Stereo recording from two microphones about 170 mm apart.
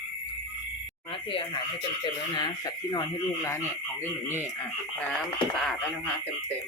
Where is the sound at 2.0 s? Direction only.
25° left (ahead or behind).